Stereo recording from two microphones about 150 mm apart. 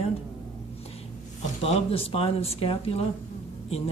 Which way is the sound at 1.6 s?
40° left (ahead or behind).